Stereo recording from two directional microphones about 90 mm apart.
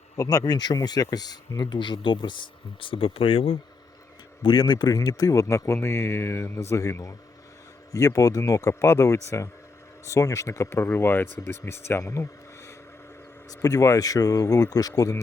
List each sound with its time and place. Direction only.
0.2 s speech: 40° left (ahead or behind)
1.8 s speech: 65° left (ahead or behind); by 3.6 s 90° left
4.4 s speech: 55° left (ahead or behind)